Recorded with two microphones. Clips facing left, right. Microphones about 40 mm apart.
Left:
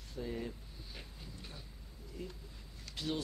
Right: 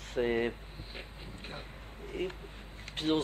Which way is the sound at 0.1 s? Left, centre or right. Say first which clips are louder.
Right 11 dB; right.